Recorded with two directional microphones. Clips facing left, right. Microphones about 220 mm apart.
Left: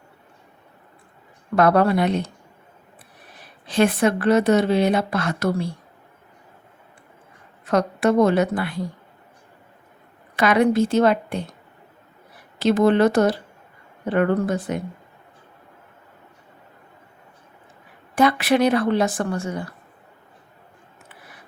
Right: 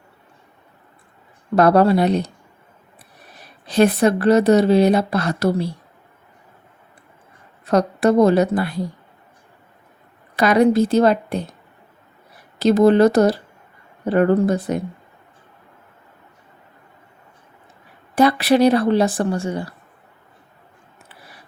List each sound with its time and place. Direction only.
1.5 s speech: 35° right (ahead or behind)
3.7 s speech: 40° right (ahead or behind)
7.6 s speech: 35° right (ahead or behind)
10.3 s speech: 35° right (ahead or behind)
12.5 s speech: 40° right (ahead or behind)
18.1 s speech: 35° right (ahead or behind)